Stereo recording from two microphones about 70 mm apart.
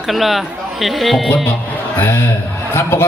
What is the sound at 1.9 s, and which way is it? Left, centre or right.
Speech, left.